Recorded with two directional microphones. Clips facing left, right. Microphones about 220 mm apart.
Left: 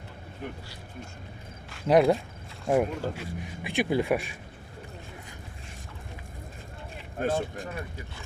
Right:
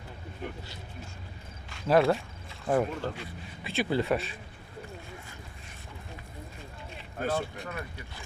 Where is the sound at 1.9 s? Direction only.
15° left (ahead or behind).